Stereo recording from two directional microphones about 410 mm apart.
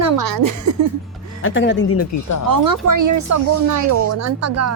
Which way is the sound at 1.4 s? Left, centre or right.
Left.